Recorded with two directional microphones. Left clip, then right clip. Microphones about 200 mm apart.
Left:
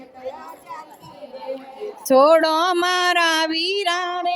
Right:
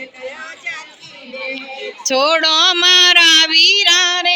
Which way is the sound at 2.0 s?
35° left (ahead or behind).